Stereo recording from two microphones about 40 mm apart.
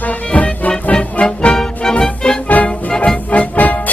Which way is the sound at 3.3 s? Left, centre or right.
Left.